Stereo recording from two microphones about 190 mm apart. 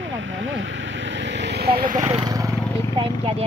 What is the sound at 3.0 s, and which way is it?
Speech, 30° right (ahead or behind).